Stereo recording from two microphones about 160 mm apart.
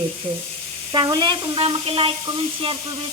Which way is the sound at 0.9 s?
25° right (ahead or behind).